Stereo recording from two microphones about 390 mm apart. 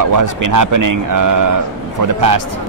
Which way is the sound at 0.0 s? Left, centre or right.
Right.